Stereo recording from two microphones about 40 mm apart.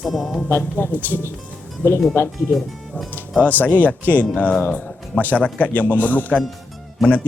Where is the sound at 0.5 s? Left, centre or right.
Left.